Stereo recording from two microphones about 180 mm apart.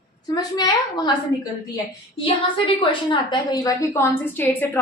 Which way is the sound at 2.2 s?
30° left (ahead or behind).